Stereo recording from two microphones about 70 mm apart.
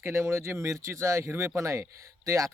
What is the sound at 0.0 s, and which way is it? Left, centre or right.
Speech, right.